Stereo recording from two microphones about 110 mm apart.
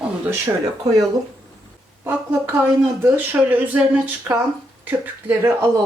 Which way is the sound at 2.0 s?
25° right (ahead or behind).